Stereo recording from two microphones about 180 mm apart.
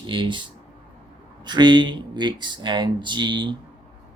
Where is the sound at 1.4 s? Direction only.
25° right (ahead or behind).